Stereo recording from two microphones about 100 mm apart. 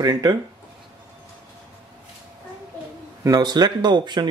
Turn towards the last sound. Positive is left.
turn(degrees=-45)  # may be behind; listen again after turning